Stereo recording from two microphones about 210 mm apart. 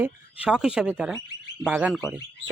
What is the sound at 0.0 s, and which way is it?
Speech, 5° right (ahead or behind).